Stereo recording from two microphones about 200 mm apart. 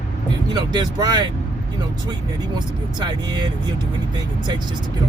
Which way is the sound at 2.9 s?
20° right (ahead or behind).